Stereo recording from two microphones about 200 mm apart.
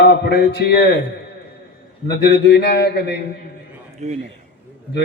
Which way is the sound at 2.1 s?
60° left (ahead or behind).